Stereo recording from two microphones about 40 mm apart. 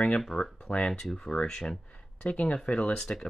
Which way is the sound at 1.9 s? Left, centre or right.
Left.